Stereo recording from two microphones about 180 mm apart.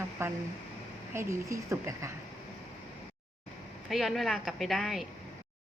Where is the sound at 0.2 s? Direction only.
15° right (ahead or behind).